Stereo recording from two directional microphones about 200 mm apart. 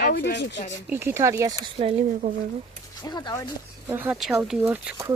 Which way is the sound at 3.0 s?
20° left (ahead or behind).